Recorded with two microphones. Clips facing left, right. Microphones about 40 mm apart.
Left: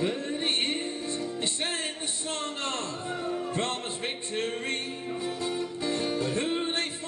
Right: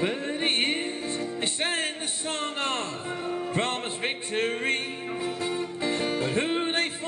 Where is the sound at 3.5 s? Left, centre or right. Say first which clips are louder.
Right 3 dB; right.